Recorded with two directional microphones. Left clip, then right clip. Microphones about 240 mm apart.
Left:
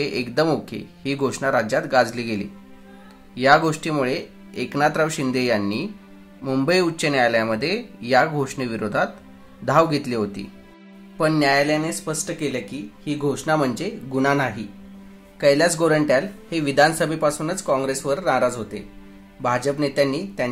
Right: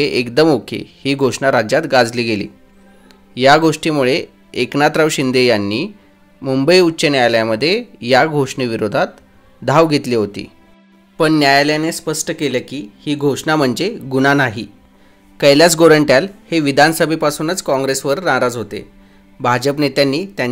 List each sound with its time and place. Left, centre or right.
0.0 s speech: right